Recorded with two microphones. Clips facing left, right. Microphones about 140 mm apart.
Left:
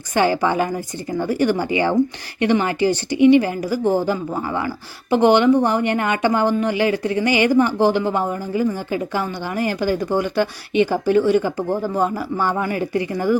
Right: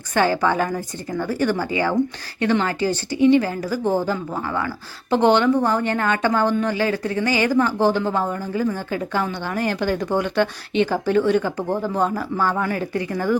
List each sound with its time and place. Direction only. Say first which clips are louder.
0.1 s speech: left 1 dB; 15° left (ahead or behind)